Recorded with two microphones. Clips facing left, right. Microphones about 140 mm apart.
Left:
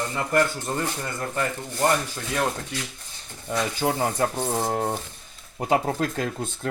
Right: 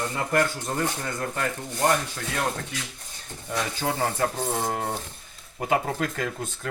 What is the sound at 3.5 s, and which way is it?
Speech, 15° left (ahead or behind).